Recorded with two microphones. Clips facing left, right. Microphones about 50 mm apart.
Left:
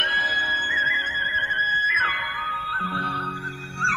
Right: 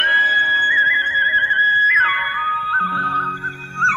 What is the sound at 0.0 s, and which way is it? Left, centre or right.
Music, right.